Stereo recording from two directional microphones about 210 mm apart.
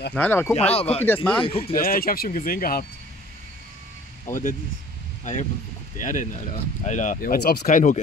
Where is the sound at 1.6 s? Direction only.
45° left (ahead or behind).